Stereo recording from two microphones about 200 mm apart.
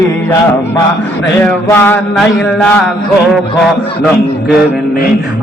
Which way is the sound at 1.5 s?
10° left (ahead or behind).